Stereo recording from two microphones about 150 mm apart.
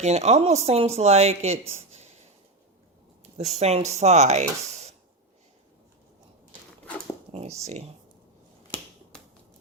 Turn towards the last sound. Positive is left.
turn(degrees=-45)  # may be behind; listen again after turning